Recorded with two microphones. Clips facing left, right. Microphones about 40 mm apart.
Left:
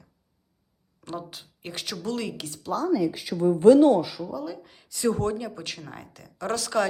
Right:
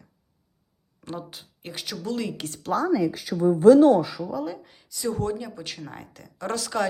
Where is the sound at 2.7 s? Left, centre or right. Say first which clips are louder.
Right 3 dB; right.